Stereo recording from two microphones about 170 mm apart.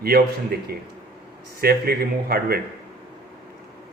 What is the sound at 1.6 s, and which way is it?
Speech, 65° right (ahead or behind).